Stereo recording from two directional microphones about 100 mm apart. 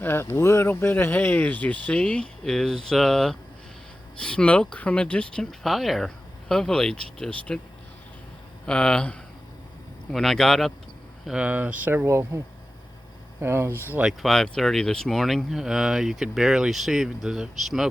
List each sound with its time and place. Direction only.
0.0 s speech: 25° left (ahead or behind)
8.6 s speech: 10° left (ahead or behind)
11.3 s speech: 15° right (ahead or behind); by 12.4 s 30° right (ahead or behind)
13.4 s speech: 25° right (ahead or behind)
14.1 s speech: centre (ahead or behind)